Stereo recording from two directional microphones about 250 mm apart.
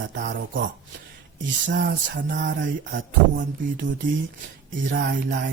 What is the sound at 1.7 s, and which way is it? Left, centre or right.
Music, right.